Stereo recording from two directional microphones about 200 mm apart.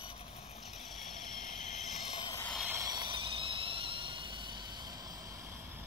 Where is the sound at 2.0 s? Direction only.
25° left (ahead or behind).